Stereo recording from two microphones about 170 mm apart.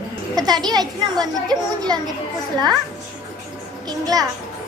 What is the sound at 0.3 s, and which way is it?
A woman's voice, 25° right (ahead or behind).